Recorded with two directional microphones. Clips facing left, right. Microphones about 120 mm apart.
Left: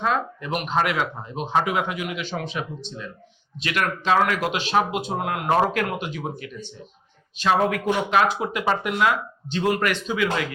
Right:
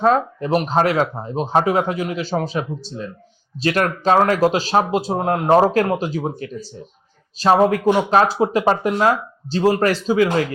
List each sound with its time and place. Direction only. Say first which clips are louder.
0.0 s speech: right 8 dB; 35° right (ahead or behind)